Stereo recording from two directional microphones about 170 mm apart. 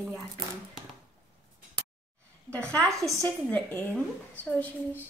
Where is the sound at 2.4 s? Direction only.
5° left (ahead or behind).